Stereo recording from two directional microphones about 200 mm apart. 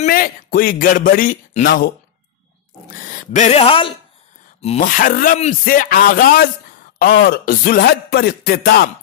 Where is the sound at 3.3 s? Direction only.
35° left (ahead or behind).